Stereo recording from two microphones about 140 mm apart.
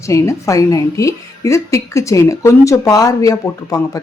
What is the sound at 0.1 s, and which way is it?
Speech, 20° left (ahead or behind).